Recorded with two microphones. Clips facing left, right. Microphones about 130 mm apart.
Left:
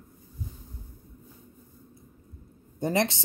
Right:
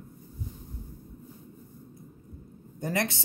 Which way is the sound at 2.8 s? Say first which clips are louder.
Left 4 dB; 25° left (ahead or behind).